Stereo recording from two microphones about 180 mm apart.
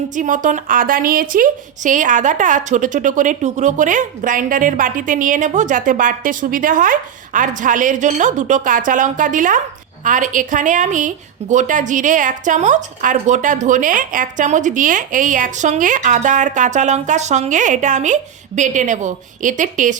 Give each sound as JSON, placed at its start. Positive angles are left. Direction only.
{"t": 0.2, "sound": "a woman's voice", "side_deg": -45}